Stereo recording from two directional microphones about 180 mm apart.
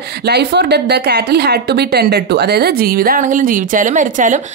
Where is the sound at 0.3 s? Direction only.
70° right (ahead or behind).